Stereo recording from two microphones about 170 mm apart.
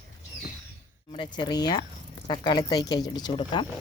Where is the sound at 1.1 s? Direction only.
30° left (ahead or behind).